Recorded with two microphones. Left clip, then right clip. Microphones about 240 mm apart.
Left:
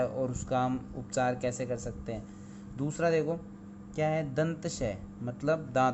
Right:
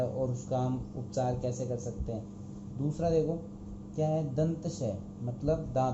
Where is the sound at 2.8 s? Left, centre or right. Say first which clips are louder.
Left 1 dB; left.